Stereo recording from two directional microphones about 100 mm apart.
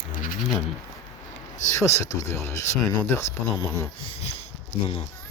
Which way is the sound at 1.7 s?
30° left (ahead or behind).